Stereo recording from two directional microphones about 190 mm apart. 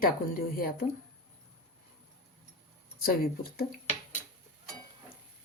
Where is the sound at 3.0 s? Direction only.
50° left (ahead or behind).